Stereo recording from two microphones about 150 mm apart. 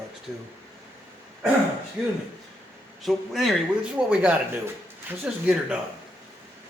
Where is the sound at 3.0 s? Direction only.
Centre (ahead or behind).